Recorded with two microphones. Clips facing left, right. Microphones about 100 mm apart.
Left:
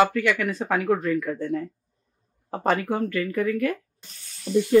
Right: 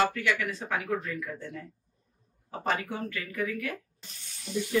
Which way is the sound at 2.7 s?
55° left (ahead or behind).